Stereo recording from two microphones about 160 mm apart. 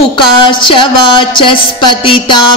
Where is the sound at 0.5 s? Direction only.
30° left (ahead or behind).